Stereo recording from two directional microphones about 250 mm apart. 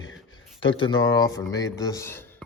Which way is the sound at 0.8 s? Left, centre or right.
Centre.